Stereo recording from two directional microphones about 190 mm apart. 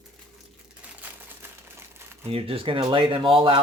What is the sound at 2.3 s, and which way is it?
Speech, 30° right (ahead or behind).